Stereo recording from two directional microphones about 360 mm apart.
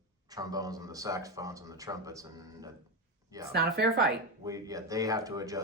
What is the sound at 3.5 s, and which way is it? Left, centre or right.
Speech, right.